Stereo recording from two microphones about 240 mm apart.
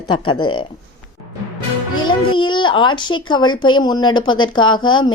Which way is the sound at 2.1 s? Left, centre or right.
Centre.